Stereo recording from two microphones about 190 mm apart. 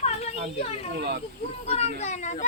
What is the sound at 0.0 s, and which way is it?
Children playing, 35° left (ahead or behind).